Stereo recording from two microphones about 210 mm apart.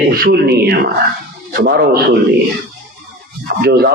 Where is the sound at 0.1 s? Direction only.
45° right (ahead or behind).